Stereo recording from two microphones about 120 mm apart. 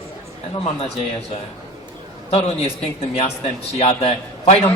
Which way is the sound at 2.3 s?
55° left (ahead or behind).